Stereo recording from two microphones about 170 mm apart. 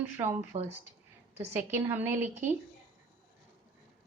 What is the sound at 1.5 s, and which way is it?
A woman's voice, 15° right (ahead or behind).